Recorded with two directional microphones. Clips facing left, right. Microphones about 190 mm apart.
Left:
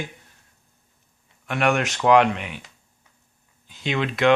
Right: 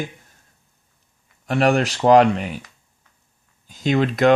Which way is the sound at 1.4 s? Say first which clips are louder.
Right 4 dB; 35° right (ahead or behind).